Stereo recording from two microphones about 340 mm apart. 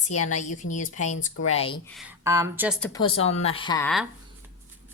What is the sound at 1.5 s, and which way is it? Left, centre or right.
Speech, centre.